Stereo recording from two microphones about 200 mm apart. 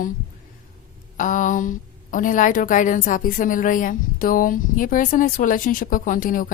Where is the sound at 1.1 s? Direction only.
40° left (ahead or behind).